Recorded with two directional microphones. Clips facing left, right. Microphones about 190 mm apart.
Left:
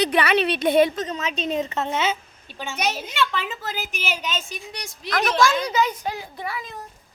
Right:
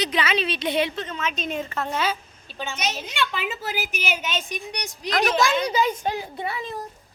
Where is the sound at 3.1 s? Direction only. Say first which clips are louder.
Left 2 dB; centre (ahead or behind).